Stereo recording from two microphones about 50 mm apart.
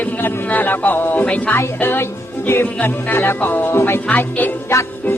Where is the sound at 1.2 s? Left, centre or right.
Left.